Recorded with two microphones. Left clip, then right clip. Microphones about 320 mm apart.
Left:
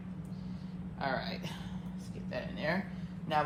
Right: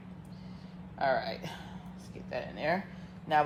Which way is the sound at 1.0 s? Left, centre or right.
Right.